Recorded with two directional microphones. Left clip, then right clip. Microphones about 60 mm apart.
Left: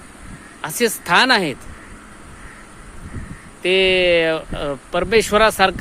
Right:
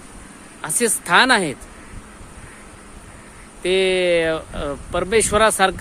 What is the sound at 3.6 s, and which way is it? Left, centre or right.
Speech, centre.